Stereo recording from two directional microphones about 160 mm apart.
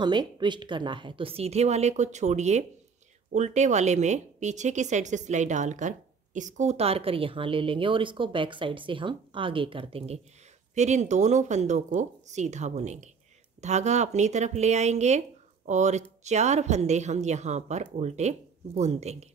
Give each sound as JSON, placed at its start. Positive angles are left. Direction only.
{"t": 0.0, "sound": "a woman's voice", "side_deg": -30}